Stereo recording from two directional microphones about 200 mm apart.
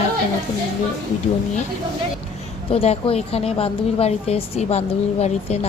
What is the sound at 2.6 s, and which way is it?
A woman's voice, 30° left (ahead or behind).